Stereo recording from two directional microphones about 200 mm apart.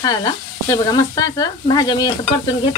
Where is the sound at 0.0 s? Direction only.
20° left (ahead or behind).